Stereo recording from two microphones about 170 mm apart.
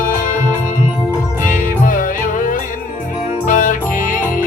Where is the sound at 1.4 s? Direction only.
50° left (ahead or behind).